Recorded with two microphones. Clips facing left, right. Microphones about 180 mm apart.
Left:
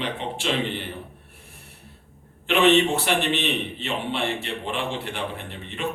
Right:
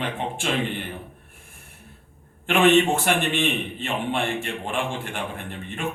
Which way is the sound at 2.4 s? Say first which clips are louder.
Right 1 dB; 50° right (ahead or behind).